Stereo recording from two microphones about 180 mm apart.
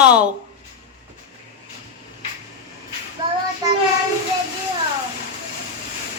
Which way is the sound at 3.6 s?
20° right (ahead or behind).